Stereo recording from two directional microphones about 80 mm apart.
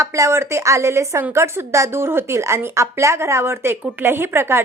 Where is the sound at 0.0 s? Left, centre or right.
Right.